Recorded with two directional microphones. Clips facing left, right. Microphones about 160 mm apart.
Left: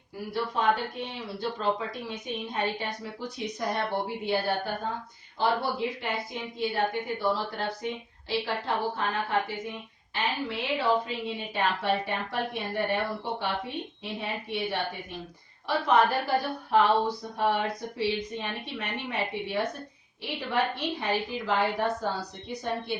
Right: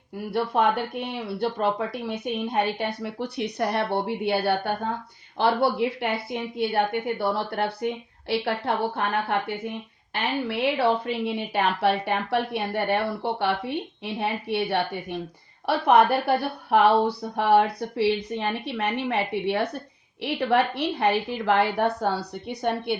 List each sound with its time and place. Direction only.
0.3 s a woman's voice: 65° right (ahead or behind)
10.5 s speech: 70° right (ahead or behind)